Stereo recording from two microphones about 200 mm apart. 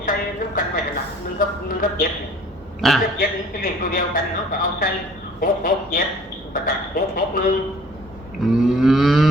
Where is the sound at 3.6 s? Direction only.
45° left (ahead or behind).